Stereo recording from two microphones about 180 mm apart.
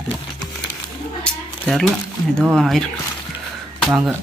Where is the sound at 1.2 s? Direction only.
5° left (ahead or behind).